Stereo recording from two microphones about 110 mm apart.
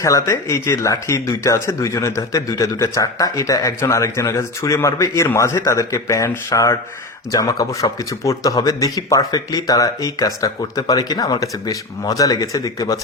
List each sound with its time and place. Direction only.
0.0 s a man's voice: 30° left (ahead or behind)